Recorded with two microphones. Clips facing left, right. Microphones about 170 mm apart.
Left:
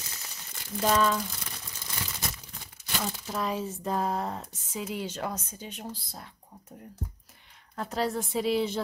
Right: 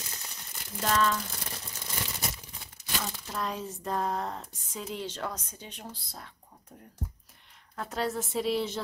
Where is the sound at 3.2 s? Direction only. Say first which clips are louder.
Left 5 dB; 5° left (ahead or behind).